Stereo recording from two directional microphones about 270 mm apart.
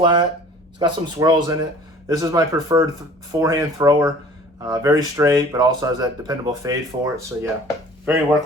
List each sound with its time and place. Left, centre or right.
0.0 s speech: centre